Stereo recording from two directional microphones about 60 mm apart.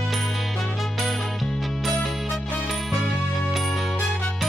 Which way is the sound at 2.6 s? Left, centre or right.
Centre.